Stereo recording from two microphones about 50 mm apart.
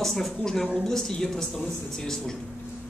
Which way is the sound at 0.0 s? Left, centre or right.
Centre.